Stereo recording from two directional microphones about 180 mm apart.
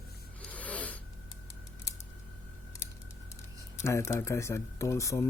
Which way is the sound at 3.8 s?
15° left (ahead or behind).